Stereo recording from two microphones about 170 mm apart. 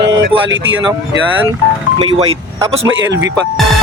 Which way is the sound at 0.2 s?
90° right.